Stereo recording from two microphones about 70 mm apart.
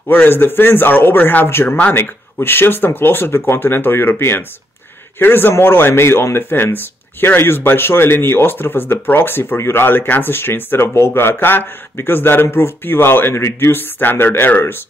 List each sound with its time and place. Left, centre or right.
0.1 s speech: left